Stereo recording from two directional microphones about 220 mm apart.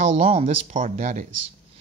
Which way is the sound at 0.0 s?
30° right (ahead or behind).